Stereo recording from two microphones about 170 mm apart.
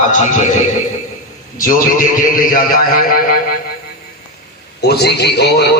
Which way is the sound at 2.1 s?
55° left (ahead or behind).